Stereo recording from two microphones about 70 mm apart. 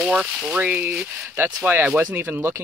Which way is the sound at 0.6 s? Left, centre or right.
Right.